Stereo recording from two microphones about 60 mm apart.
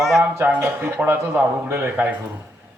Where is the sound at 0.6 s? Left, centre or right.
Right.